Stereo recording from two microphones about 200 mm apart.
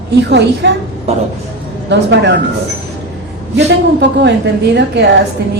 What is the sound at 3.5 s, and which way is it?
Speech, 60° right (ahead or behind).